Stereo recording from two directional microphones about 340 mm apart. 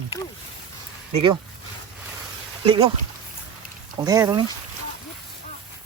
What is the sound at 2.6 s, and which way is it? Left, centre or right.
Speech, centre.